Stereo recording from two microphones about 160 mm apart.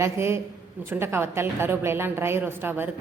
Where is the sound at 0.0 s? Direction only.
15° right (ahead or behind).